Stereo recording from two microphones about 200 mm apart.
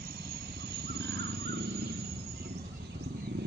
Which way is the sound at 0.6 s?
55° right (ahead or behind).